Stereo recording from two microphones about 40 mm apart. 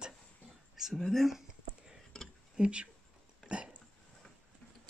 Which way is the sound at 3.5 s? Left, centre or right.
Right.